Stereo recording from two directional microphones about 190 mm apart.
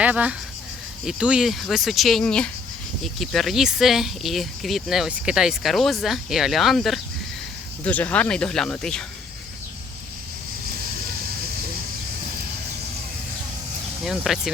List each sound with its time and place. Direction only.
0.0 s speech: 5° right (ahead or behind)
14.0 s speech: centre (ahead or behind)